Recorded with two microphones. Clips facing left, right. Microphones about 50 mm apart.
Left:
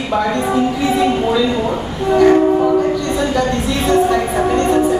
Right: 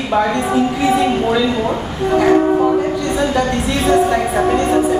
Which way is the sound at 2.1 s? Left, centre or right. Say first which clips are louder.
Left 2 dB; centre.